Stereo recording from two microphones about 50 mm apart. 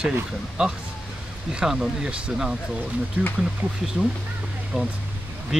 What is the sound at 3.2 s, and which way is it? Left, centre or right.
Speech, right.